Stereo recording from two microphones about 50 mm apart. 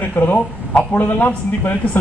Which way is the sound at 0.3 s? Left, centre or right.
Left.